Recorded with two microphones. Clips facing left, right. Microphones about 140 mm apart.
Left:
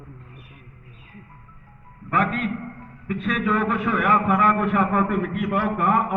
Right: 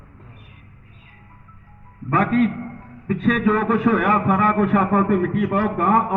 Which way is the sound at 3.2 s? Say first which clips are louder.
Right 4 dB; 40° right (ahead or behind).